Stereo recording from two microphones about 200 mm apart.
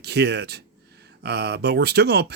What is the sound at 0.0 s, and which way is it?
Speech, 55° right (ahead or behind).